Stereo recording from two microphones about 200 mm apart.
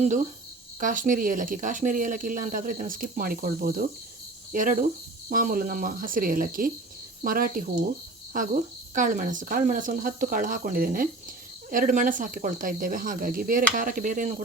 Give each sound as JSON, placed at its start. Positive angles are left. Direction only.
{"t": 0.8, "sound": "speech", "side_deg": -40}